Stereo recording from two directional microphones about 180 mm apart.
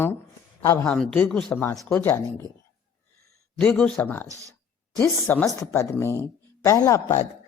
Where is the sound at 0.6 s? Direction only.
15° left (ahead or behind).